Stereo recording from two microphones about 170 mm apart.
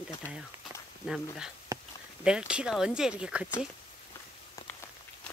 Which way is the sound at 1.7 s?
20° right (ahead or behind).